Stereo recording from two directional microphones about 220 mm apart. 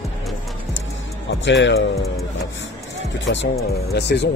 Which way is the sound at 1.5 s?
55° left (ahead or behind).